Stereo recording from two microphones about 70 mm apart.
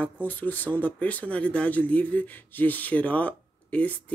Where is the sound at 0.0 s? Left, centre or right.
Left.